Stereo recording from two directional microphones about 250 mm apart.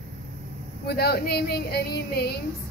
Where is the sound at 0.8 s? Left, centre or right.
Left.